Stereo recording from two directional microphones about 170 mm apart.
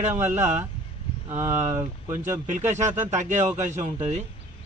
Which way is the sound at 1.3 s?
15° right (ahead or behind).